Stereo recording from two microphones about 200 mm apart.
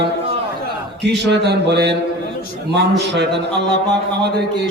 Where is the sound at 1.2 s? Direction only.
55° right (ahead or behind).